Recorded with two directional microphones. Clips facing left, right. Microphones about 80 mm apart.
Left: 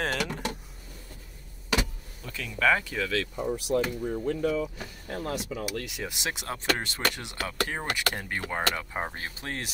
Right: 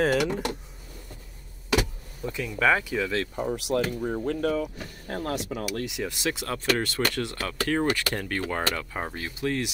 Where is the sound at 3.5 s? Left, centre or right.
Right.